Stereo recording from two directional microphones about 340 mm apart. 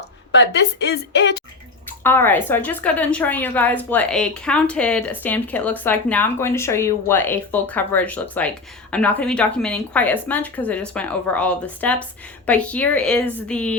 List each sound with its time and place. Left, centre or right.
0.3 s a woman's voice: left
2.0 s speech: centre